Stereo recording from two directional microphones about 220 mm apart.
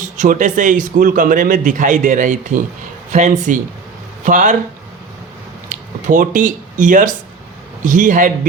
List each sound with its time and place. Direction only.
0.2 s a man's voice: 35° right (ahead or behind)
5.6 s a man's voice: 35° right (ahead or behind)